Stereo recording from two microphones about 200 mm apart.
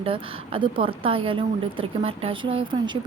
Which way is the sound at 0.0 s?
25° right (ahead or behind).